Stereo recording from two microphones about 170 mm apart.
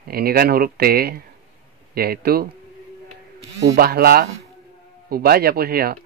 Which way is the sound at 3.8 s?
65° right (ahead or behind).